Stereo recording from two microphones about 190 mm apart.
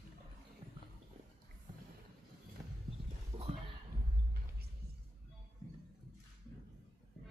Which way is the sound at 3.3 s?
35° right (ahead or behind).